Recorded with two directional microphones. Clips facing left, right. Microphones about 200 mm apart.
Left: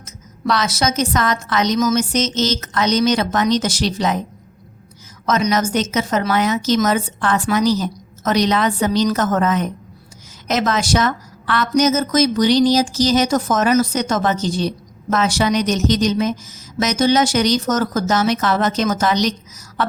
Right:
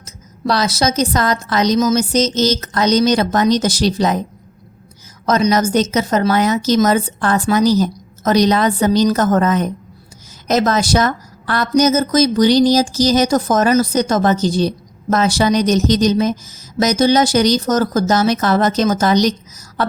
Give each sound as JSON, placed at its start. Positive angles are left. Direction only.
{"t": 0.0, "sound": "speech", "side_deg": -35}
{"t": 5.2, "sound": "speech", "side_deg": -35}